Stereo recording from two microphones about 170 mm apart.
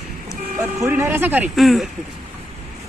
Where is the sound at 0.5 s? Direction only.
15° right (ahead or behind).